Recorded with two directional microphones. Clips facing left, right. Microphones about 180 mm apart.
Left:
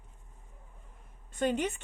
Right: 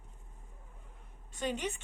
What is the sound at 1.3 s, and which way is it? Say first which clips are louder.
Speech: left 6 dB; 55° left (ahead or behind).